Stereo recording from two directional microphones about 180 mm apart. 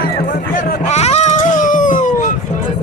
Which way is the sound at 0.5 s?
40° left (ahead or behind).